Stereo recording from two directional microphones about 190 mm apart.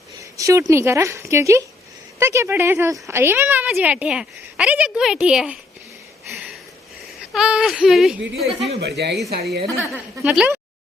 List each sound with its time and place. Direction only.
0.2 s a woman's voice: 15° right (ahead or behind)
7.2 s speech: 5° right (ahead or behind)
8.8 s speech: 60° right (ahead or behind)
9.9 s a woman's voice: 5° right (ahead or behind)